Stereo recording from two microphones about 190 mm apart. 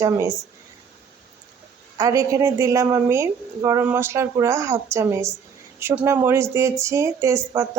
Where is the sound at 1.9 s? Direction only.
15° right (ahead or behind).